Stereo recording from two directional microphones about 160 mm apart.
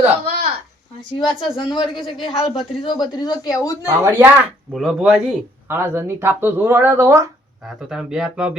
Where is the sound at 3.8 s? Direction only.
15° right (ahead or behind).